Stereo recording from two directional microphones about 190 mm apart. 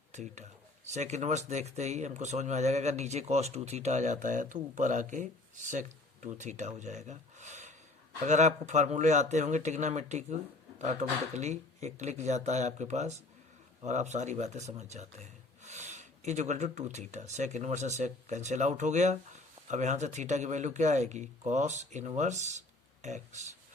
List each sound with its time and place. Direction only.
0.1 s speech: 40° right (ahead or behind)